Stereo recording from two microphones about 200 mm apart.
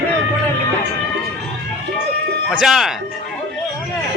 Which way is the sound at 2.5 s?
Centre (ahead or behind).